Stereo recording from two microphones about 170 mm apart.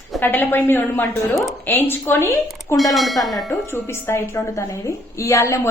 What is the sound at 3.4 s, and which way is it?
A woman's voice, 15° left (ahead or behind).